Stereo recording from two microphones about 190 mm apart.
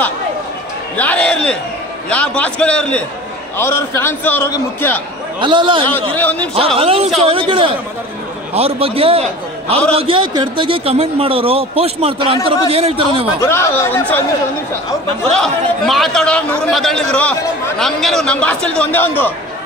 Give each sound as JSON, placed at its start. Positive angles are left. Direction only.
{"t": 0.9, "sound": "a sound", "side_deg": 5}
{"t": 2.0, "sound": "a man's voice", "side_deg": 5}
{"t": 5.4, "sound": "a man's voice", "side_deg": -25}
{"t": 6.1, "sound": "a man's voice", "side_deg": 10}
{"t": 6.8, "sound": "a man's voice", "side_deg": -30}
{"t": 13.4, "sound": "a man's voice", "side_deg": 15}
{"t": 15.3, "sound": "speech", "side_deg": 0}